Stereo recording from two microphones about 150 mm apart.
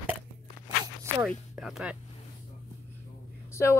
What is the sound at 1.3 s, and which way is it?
Speech, centre (ahead or behind).